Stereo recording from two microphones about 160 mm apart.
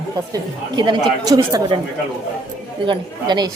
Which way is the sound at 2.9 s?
30° right (ahead or behind).